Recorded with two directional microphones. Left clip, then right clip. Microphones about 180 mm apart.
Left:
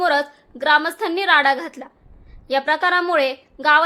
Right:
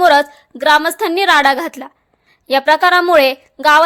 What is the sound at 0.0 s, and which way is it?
A woman's voice, 35° right (ahead or behind).